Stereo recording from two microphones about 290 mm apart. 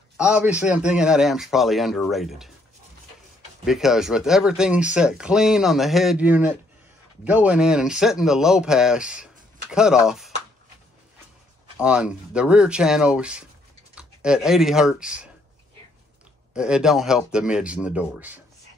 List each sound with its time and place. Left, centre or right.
0.2 s speech: centre
3.6 s speech: centre
11.8 s speech: centre
16.5 s speech: centre